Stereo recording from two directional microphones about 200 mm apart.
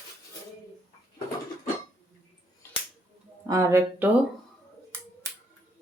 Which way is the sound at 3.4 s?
15° right (ahead or behind).